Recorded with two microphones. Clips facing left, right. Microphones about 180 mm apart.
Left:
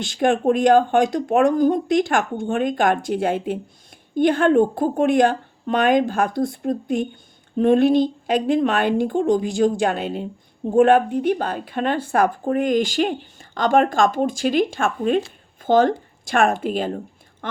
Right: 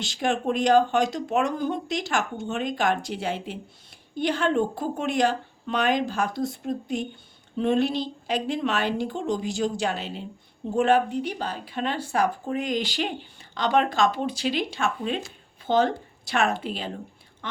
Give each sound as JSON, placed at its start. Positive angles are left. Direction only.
{"t": 0.0, "sound": "speech", "side_deg": 55}